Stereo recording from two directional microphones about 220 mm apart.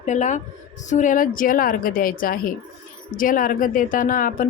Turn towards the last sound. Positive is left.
turn(degrees=40)  # may be behind; listen again after turning